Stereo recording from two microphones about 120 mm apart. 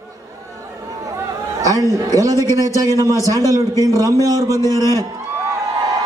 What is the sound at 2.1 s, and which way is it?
A man's voice, 30° right (ahead or behind).